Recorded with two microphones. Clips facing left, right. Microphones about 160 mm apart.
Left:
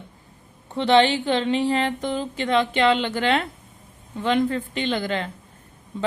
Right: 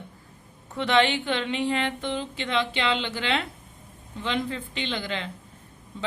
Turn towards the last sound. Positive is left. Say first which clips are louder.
# left 6 dB
turn(degrees=45)  # may be behind; listen again after turning